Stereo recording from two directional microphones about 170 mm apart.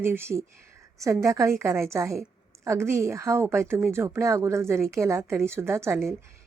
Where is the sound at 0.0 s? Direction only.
15° right (ahead or behind).